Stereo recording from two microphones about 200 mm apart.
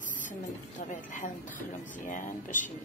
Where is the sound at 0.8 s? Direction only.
40° left (ahead or behind).